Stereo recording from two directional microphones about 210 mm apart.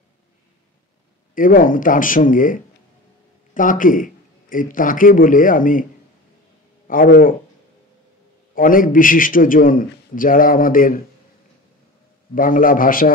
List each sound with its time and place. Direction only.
1.3 s a man's voice: 40° left (ahead or behind)
6.9 s a man's voice: 40° left (ahead or behind)
8.5 s a man's voice: 40° left (ahead or behind)
12.4 s a man's voice: 40° left (ahead or behind)